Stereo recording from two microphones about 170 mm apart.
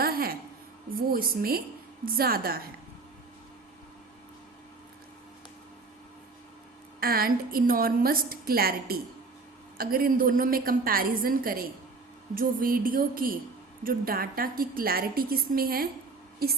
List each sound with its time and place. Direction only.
0.0 s music: 60° right (ahead or behind)
0.9 s a woman's voice: 60° right (ahead or behind)
7.0 s a woman's voice: 60° right (ahead or behind)